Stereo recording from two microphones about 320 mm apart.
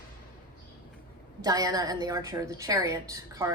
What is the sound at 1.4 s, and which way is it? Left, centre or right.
A woman's voice, centre.